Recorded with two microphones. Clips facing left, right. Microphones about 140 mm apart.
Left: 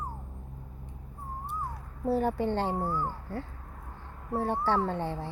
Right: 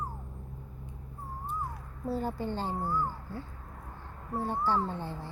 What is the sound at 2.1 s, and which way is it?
Speech, 70° left (ahead or behind).